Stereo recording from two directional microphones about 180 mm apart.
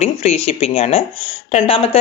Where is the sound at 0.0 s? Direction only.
40° left (ahead or behind).